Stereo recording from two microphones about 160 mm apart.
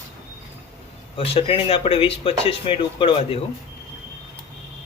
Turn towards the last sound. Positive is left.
turn(degrees=35)  # may be behind; listen again after turning